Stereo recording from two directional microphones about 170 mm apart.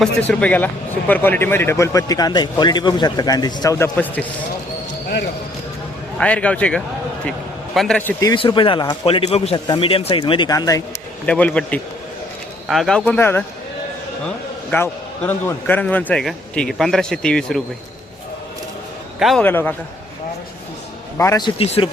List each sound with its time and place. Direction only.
0.0 s speech: 10° left (ahead or behind)
6.1 s a man's voice: 5° left (ahead or behind)
8.2 s speech: 25° left (ahead or behind)
11.3 s a man's voice: 10° left (ahead or behind)
14.7 s a man's voice: 10° left (ahead or behind)
19.2 s a man's voice: centre (ahead or behind)
19.5 s speech: 10° left (ahead or behind)
21.2 s speech: 20° left (ahead or behind)
21.6 s speech: 35° left (ahead or behind)